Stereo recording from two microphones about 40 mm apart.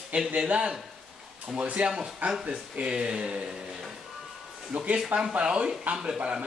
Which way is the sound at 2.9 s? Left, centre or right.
Right.